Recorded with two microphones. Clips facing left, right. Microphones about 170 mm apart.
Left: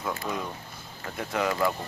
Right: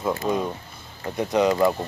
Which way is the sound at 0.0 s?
25° right (ahead or behind).